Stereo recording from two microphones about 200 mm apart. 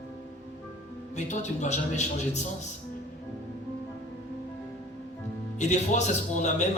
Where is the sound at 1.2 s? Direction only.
35° left (ahead or behind).